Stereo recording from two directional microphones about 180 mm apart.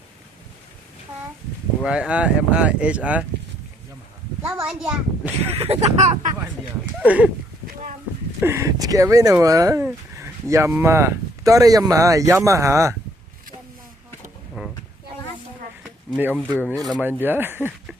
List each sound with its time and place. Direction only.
1.8 s speech: 5° right (ahead or behind)
4.4 s speech: 5° right (ahead or behind)
5.4 s speech: 35° right (ahead or behind)
7.0 s speech: 10° right (ahead or behind)
8.4 s speech: 15° right (ahead or behind)
14.6 s a sound: 10° right (ahead or behind)
15.8 s a sound: 5° right (ahead or behind)
16.4 s speech: 5° left (ahead or behind)
17.0 s speech: 10° right (ahead or behind)